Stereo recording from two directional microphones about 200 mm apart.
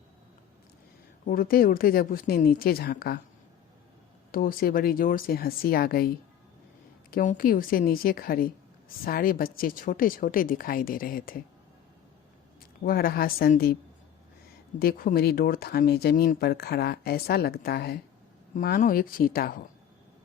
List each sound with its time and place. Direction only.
1.3 s speech: 45° left (ahead or behind)
4.3 s speech: 45° left (ahead or behind)
7.1 s speech: 45° left (ahead or behind)
12.8 s speech: 45° left (ahead or behind)
14.8 s speech: 50° left (ahead or behind)